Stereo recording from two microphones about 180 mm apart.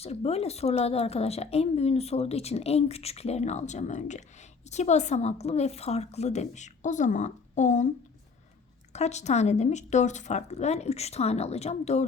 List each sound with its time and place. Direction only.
0.0 s a woman's voice: 35° left (ahead or behind)
8.9 s a woman's voice: 40° left (ahead or behind)